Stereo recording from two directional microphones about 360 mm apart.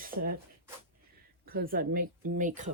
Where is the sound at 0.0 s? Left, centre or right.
Right.